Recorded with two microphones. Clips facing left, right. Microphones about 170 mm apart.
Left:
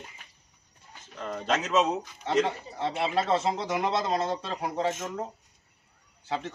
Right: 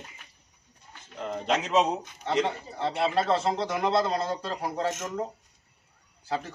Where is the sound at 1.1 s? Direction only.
15° right (ahead or behind).